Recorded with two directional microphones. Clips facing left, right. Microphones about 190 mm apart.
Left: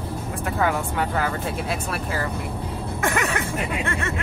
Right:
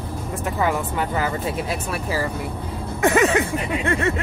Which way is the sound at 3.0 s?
20° right (ahead or behind).